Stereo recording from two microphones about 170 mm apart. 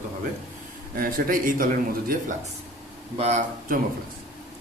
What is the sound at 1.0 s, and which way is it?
Speech, 55° right (ahead or behind).